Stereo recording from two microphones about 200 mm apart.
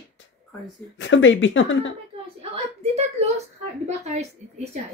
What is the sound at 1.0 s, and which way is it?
Speech, 70° left (ahead or behind).